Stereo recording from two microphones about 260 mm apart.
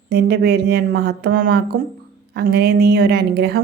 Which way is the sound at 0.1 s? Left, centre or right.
Right.